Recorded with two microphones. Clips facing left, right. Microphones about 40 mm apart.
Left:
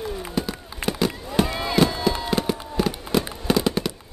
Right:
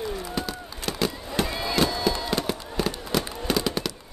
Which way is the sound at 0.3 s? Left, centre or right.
Centre.